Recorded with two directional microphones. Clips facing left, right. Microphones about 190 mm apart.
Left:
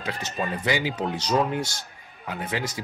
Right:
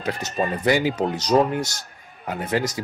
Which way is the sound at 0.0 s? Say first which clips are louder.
Right 5 dB; 45° right (ahead or behind).